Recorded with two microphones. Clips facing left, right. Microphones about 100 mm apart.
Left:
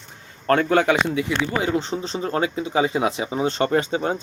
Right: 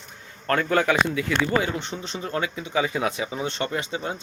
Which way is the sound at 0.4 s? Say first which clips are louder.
Left 4 dB; 30° left (ahead or behind).